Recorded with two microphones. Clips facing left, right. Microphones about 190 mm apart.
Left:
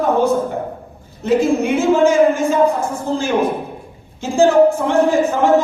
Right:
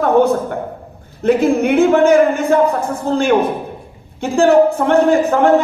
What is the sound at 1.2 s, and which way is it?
A man's voice, 60° right (ahead or behind).